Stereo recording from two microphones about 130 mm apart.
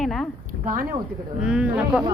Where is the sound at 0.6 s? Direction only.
90° right.